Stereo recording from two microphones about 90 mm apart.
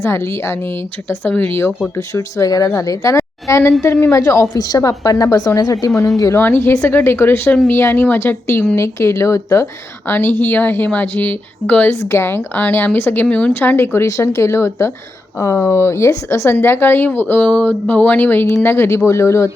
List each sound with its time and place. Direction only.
0.0 s a woman's voice: 30° left (ahead or behind)
6.4 s a woman's voice: 25° left (ahead or behind)
10.1 s speech: 25° left (ahead or behind)
11.9 s speech: 30° left (ahead or behind)